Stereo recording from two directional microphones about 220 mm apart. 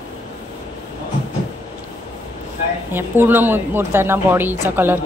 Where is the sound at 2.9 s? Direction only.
10° right (ahead or behind).